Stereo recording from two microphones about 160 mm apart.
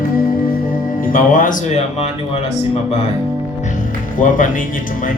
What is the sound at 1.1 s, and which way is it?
Mantra, 55° left (ahead or behind).